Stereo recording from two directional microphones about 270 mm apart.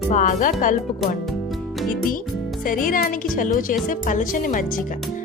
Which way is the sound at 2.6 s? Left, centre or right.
Left.